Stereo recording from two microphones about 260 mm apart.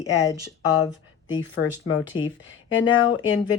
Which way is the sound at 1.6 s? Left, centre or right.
Left.